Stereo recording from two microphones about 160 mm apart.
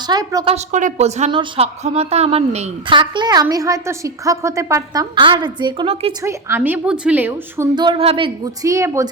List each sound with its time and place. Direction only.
0.1 s a woman's voice: 20° right (ahead or behind)
0.4 s a woman's voice: 45° right (ahead or behind)
3.0 s a woman's voice: 25° right (ahead or behind)
6.6 s a woman's voice: 5° right (ahead or behind)
7.8 s a woman's voice: 30° right (ahead or behind)
8.6 s a woman's voice: 20° right (ahead or behind)